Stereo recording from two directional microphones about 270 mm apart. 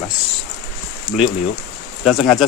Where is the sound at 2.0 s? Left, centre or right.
Centre.